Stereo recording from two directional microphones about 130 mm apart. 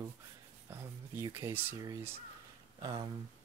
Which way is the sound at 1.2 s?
20° right (ahead or behind).